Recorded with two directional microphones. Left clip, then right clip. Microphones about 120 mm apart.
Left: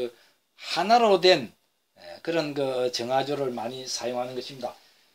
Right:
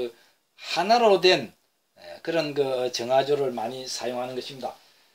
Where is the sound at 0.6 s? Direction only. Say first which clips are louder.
Even; 40° left (ahead or behind).